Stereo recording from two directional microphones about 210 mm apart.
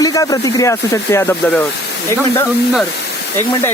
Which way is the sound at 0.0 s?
15° left (ahead or behind).